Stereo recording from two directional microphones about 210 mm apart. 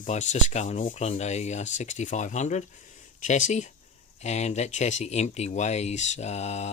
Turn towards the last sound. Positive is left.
turn(degrees=30)  # may be behind; listen again after turning